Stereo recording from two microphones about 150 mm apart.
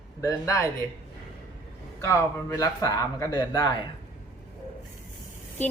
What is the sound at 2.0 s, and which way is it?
A man's voice, 20° left (ahead or behind).